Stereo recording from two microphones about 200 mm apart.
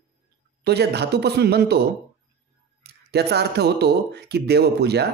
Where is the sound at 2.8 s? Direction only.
55° right (ahead or behind).